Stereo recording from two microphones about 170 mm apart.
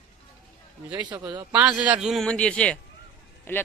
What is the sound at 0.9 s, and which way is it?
Speech, 25° right (ahead or behind).